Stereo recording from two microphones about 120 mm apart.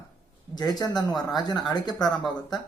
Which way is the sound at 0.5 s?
35° left (ahead or behind).